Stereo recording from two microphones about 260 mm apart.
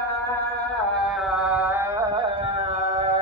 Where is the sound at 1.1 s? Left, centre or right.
Centre.